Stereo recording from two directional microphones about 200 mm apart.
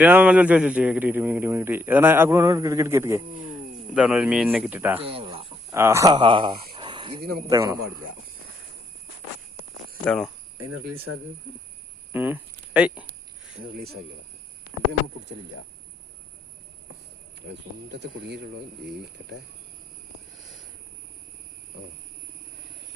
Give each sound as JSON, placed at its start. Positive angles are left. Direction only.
{"t": 0.0, "sound": "a man's voice", "side_deg": -10}
{"t": 4.9, "sound": "speech", "side_deg": -30}
{"t": 5.7, "sound": "speech", "side_deg": -15}
{"t": 6.7, "sound": "a sound", "side_deg": -20}
{"t": 7.5, "sound": "a man's voice", "side_deg": -15}
{"t": 10.0, "sound": "speech", "side_deg": 5}
{"t": 12.1, "sound": "speech", "side_deg": -10}
{"t": 17.5, "sound": "speech", "side_deg": -60}